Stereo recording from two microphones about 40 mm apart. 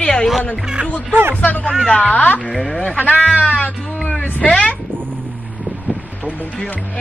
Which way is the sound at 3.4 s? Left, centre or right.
Left.